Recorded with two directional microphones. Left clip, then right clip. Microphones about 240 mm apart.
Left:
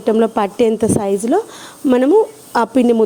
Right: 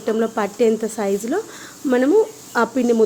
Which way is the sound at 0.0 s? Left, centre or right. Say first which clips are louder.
Left 6 dB; left.